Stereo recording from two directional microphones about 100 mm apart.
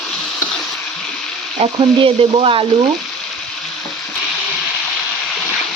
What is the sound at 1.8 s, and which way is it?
Frying, 60° right (ahead or behind).